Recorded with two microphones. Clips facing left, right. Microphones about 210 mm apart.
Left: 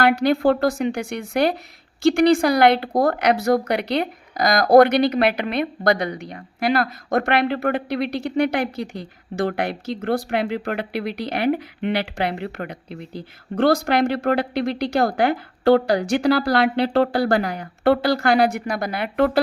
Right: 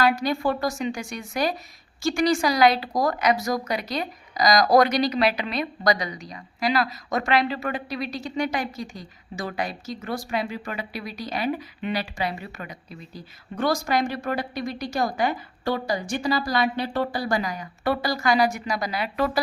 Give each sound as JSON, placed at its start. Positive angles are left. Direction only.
{"t": 0.0, "sound": "speech", "side_deg": 65}